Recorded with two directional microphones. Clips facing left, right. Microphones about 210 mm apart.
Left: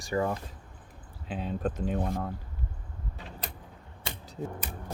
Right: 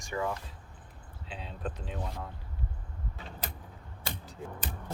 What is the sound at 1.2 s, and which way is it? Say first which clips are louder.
Speech: left 8 dB; 50° left (ahead or behind).